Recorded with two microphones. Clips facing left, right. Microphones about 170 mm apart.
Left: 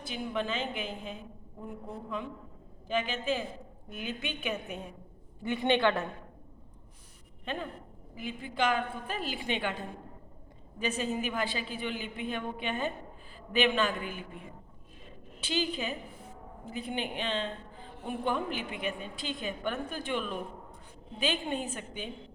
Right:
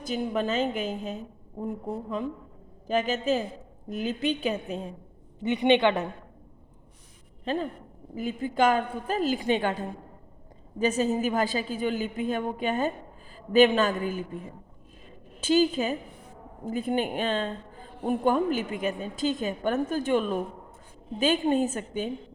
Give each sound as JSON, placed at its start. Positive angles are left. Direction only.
{"t": 0.0, "sound": "a woman's voice", "side_deg": -40}
{"t": 5.4, "sound": "a woman's voice", "side_deg": -20}
{"t": 7.4, "sound": "a woman's voice", "side_deg": -35}
{"t": 15.4, "sound": "a woman's voice", "side_deg": -45}